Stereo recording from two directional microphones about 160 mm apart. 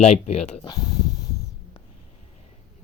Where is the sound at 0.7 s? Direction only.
25° left (ahead or behind).